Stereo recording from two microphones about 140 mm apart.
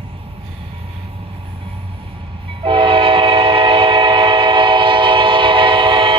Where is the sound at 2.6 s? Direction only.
40° right (ahead or behind).